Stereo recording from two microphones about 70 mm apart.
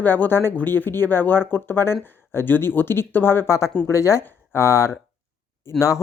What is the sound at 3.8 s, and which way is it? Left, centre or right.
Speech, left.